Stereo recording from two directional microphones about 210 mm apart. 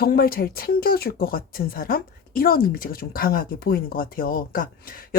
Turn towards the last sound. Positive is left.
turn(degrees=45)  # may be behind; listen again after turning